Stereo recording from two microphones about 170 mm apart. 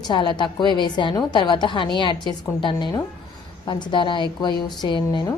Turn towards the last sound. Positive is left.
turn(degrees=25)  # may be behind; listen again after turning